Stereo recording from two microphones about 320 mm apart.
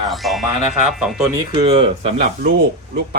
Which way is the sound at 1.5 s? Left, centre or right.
Centre.